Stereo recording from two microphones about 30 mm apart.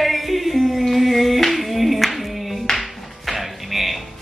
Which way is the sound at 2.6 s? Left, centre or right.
Centre.